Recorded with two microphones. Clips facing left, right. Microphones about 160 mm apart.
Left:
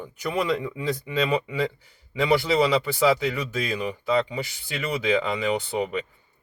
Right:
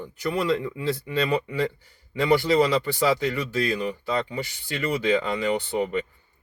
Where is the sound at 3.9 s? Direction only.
10° left (ahead or behind).